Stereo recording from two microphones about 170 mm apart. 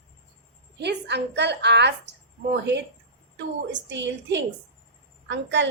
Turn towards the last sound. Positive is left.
turn(degrees=-90)